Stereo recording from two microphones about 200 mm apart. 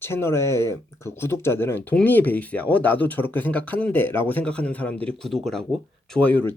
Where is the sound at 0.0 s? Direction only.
10° left (ahead or behind).